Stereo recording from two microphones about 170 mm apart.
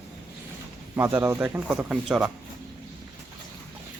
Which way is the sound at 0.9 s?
10° right (ahead or behind).